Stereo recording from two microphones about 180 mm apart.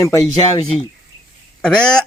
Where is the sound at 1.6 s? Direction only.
5° left (ahead or behind).